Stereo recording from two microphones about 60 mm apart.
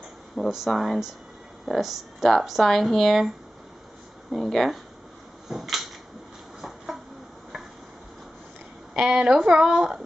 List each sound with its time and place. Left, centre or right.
0.5 s speech: centre
4.3 s speech: centre
5.5 s a sound: centre
8.9 s speech: centre